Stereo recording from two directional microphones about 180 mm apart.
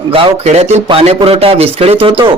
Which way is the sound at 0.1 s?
35° right (ahead or behind).